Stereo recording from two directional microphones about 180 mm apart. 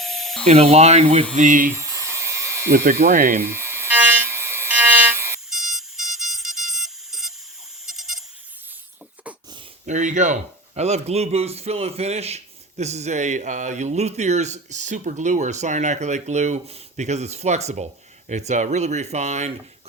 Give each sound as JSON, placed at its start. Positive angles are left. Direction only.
{"t": 0.0, "sound": "dental drill", "side_deg": 0}
{"t": 0.4, "sound": "speech", "side_deg": -35}
{"t": 1.7, "sound": "a sound", "side_deg": -15}
{"t": 2.6, "sound": "speech", "side_deg": -55}
{"t": 3.4, "sound": "electric toothbrush", "side_deg": -15}
{"t": 5.5, "sound": "alarm clock", "side_deg": 0}
{"t": 7.9, "sound": "bleat", "side_deg": 0}
{"t": 9.8, "sound": "speech", "side_deg": -40}